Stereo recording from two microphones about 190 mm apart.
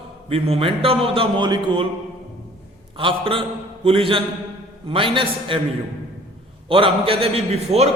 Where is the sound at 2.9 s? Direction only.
30° right (ahead or behind).